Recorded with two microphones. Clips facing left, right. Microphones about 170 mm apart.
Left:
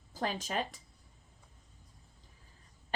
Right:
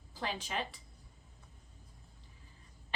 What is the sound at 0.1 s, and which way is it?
Speech, 45° left (ahead or behind).